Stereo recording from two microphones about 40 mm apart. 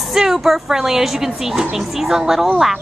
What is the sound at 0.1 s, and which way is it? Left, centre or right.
Speech, centre.